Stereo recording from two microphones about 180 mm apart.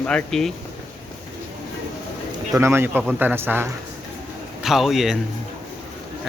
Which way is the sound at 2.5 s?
15° right (ahead or behind).